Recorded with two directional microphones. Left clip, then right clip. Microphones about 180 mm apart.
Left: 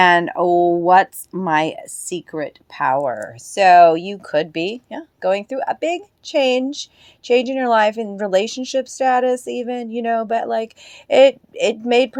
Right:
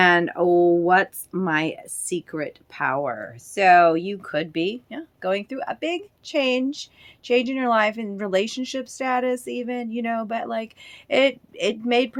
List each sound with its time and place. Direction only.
0.0 s speech: 30° left (ahead or behind)